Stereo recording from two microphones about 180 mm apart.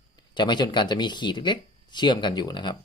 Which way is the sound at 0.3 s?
25° left (ahead or behind).